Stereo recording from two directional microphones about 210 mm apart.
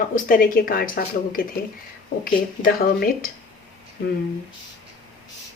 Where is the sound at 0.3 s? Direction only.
45° left (ahead or behind).